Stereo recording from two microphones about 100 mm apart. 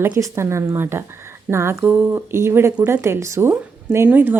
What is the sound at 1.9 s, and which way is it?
Speech, 15° right (ahead or behind).